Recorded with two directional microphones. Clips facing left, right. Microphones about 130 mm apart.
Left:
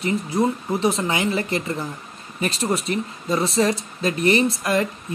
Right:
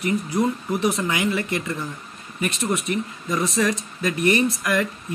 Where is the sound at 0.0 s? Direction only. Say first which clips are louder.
Left 1 dB; 25° left (ahead or behind).